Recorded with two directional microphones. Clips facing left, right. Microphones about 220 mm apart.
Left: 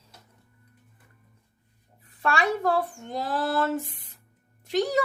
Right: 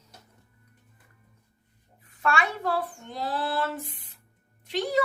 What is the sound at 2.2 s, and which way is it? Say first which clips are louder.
Speech: left 3 dB; 35° left (ahead or behind).